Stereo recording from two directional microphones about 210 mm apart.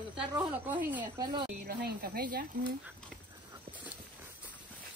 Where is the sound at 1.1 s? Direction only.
20° right (ahead or behind).